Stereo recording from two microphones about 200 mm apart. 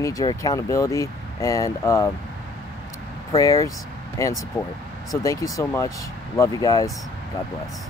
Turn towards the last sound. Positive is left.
turn(degrees=15)  # may be behind; listen again after turning